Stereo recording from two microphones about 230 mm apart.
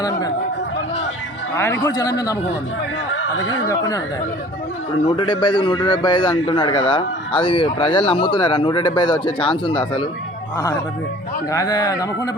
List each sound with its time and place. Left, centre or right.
1.5 s speech: centre
3.7 s speech: centre
5.0 s speech: left
11.5 s speech: centre